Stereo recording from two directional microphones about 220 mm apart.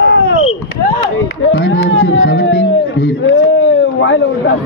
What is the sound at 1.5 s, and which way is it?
Speech, 60° left (ahead or behind).